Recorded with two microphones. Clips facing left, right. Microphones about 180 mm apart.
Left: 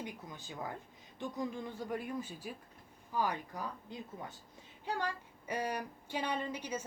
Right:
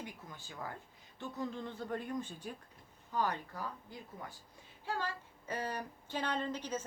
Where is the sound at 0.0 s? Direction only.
15° left (ahead or behind).